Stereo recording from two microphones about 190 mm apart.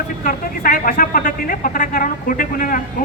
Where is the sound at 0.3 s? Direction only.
45° left (ahead or behind).